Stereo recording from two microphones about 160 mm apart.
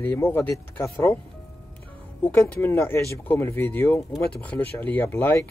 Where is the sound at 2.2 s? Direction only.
10° left (ahead or behind).